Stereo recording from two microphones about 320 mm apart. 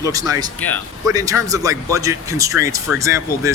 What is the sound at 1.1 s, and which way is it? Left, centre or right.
Speech, centre.